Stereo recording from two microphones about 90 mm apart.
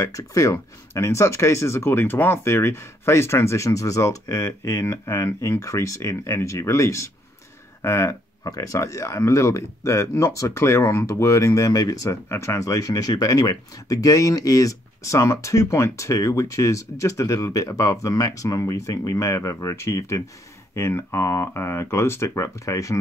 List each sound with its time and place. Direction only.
0.0 s speech: 35° left (ahead or behind)